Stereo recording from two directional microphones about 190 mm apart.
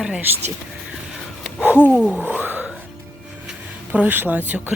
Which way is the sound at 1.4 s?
5° right (ahead or behind).